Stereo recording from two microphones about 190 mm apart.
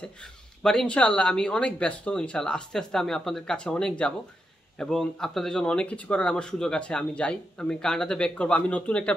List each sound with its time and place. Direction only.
0.6 s speech: 5° left (ahead or behind)